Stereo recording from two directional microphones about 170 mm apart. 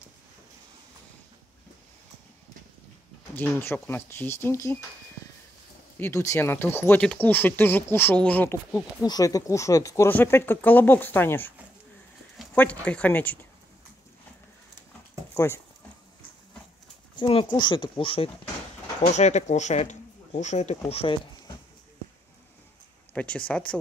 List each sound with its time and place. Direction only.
3.3 s speech: 10° left (ahead or behind)
5.9 s speech: 15° left (ahead or behind)
9.0 s speech: 20° left (ahead or behind)
12.5 s speech: 5° left (ahead or behind)
15.3 s speech: 15° left (ahead or behind)
17.2 s speech: 30° left (ahead or behind)
23.1 s speech: 5° left (ahead or behind)